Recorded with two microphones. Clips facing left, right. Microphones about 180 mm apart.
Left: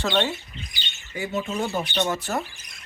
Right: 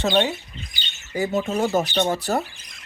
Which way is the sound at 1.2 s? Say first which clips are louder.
Right 5 dB; 40° right (ahead or behind).